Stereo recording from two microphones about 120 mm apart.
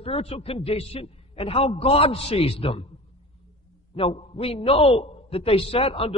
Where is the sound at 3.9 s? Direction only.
55° left (ahead or behind).